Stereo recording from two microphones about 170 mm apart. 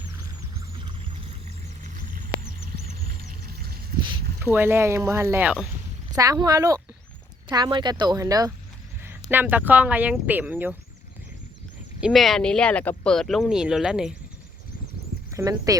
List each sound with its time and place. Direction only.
0.8 s pour: 30° right (ahead or behind)
3.0 s music: 60° right (ahead or behind)
4.4 s speech: 15° right (ahead or behind)
6.1 s speech: 20° right (ahead or behind)
11.9 s speech: centre (ahead or behind)
15.4 s speech: 20° right (ahead or behind)